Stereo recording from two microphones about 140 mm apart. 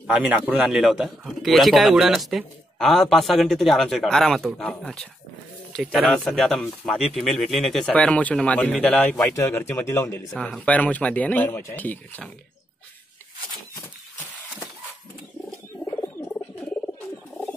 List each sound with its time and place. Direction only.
0.1 s a man's voice: 10° right (ahead or behind); by 9.2 s 5° left (ahead or behind)
9.2 s a man's voice: 20° left (ahead or behind)
10.3 s a man's voice: 5° left (ahead or behind)
16.0 s frog: 15° left (ahead or behind)